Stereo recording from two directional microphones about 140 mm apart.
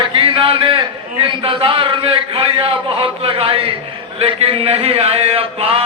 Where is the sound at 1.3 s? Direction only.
40° right (ahead or behind).